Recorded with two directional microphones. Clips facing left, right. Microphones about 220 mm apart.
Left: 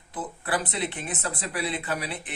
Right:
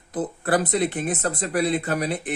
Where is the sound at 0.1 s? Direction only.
40° right (ahead or behind).